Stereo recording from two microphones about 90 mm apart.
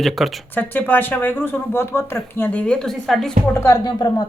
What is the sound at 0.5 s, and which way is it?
Speech, 20° left (ahead or behind).